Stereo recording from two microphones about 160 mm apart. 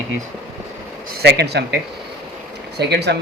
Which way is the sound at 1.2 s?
90° right.